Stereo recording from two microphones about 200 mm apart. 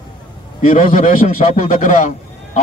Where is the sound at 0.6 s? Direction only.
40° left (ahead or behind).